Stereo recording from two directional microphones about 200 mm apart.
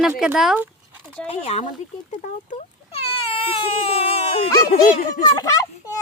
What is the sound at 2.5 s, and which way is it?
Baby cry, 30° left (ahead or behind).